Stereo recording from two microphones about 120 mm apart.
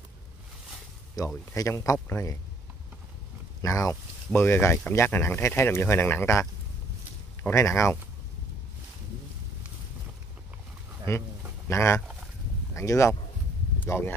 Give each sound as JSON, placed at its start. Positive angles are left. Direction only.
{"t": 1.2, "sound": "speech", "side_deg": 30}
{"t": 3.6, "sound": "speech", "side_deg": 25}
{"t": 7.4, "sound": "speech", "side_deg": 25}
{"t": 11.1, "sound": "speech", "side_deg": 25}